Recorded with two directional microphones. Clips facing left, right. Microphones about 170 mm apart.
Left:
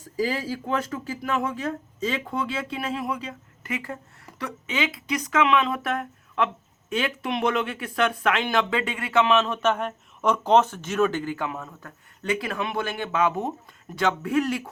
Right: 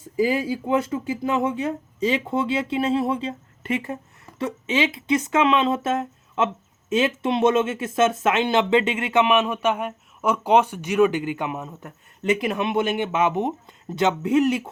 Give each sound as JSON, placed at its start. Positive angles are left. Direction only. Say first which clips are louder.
{"t": 0.0, "sound": "speech", "louder": "right 5 dB", "side_deg": -20}